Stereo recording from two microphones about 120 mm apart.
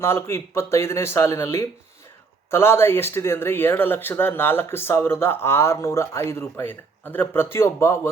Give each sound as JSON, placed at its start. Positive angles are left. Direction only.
{"t": 0.0, "sound": "speech", "side_deg": 20}